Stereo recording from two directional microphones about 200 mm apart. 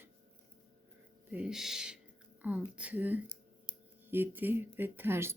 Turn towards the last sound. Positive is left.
turn(degrees=-10)  # may be behind; listen again after turning